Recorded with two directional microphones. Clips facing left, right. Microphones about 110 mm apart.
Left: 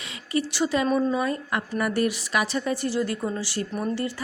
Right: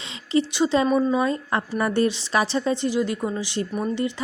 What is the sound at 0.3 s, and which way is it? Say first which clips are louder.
A woman's voice: right 4 dB; 20° right (ahead or behind).